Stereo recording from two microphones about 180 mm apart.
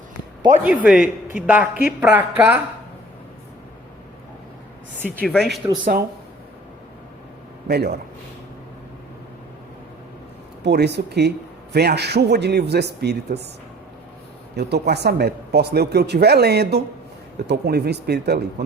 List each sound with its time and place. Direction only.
0.6 s a woman's voice: 5° right (ahead or behind)
5.2 s speech: 5° left (ahead or behind)
7.7 s speech: 65° right (ahead or behind)
10.6 s a man's voice: 65° right (ahead or behind)
14.5 s speech: 65° right (ahead or behind)